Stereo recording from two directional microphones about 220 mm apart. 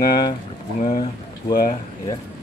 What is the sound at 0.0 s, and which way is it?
Speech, 15° left (ahead or behind).